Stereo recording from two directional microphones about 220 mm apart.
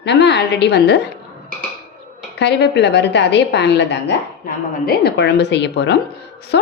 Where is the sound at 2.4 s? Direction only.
50° left (ahead or behind).